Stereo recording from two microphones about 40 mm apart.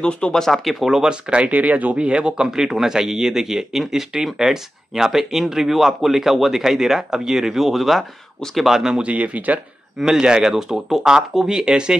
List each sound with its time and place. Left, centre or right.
0.0 s speech: left
0.4 s speech: centre
1.3 s speech: right
2.0 s speech: right
9.0 s speech: right
9.9 s speech: centre